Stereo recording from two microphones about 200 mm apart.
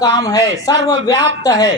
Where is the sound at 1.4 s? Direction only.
20° left (ahead or behind).